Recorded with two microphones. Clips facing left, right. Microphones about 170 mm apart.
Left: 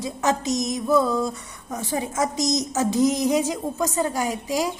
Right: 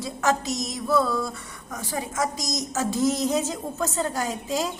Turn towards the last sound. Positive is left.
turn(degrees=15)  # may be behind; listen again after turning